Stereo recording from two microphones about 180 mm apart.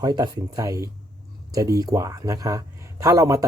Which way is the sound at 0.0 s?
20° right (ahead or behind).